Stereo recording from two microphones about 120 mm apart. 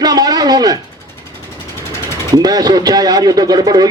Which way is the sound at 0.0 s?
30° right (ahead or behind).